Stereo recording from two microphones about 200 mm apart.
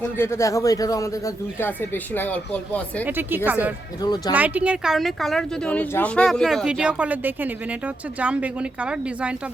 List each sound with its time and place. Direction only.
0.2 s a man's voice: 15° left (ahead or behind)
3.0 s a woman's voice: 10° right (ahead or behind)
4.0 s speech: 20° left (ahead or behind)
4.4 s a woman's voice: 5° right (ahead or behind)